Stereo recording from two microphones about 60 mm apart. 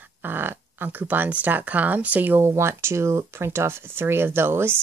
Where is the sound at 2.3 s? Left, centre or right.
Right.